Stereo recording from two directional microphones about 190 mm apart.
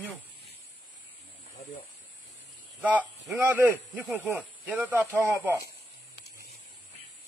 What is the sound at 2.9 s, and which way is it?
Speech, 5° right (ahead or behind).